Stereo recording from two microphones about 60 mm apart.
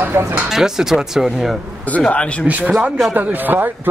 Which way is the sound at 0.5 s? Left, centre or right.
Centre.